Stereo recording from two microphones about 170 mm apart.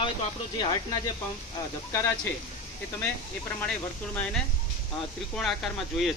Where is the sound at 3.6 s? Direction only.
10° left (ahead or behind).